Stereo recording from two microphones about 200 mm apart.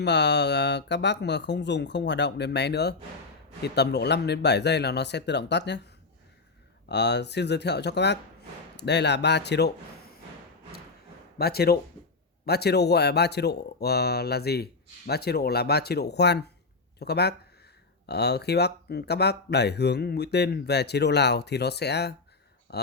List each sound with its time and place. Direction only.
0.0 s speech: 60° left (ahead or behind)
6.8 s speech: 60° left (ahead or behind)
11.3 s speech: 50° left (ahead or behind)